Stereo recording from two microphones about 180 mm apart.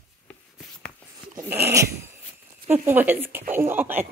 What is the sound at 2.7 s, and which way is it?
Speech, 10° right (ahead or behind).